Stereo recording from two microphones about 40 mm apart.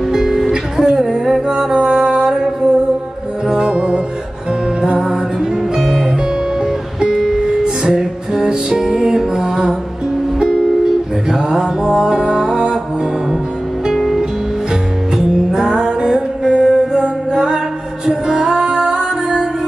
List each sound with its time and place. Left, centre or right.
0.1 s music: centre
5.0 s music: centre
6.6 s music: centre
13.9 s music: centre
15.2 s music: centre